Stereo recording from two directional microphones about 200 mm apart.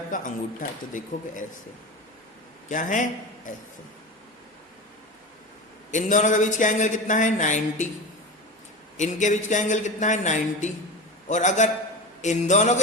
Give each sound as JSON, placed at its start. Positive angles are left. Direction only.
{"t": 0.1, "sound": "speech", "side_deg": 40}
{"t": 2.6, "sound": "speech", "side_deg": 40}
{"t": 5.9, "sound": "speech", "side_deg": 40}
{"t": 9.0, "sound": "speech", "side_deg": 35}